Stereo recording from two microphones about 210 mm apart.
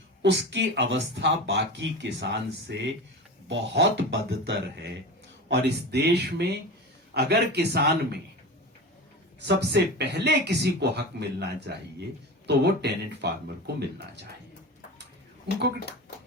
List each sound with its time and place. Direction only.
0.2 s speech: 55° right (ahead or behind)
9.5 s speech: 55° right (ahead or behind)